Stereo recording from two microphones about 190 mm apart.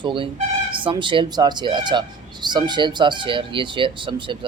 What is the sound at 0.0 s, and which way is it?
Speech, 25° right (ahead or behind).